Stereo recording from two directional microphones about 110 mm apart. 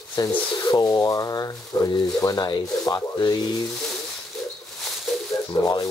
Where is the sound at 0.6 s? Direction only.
35° left (ahead or behind).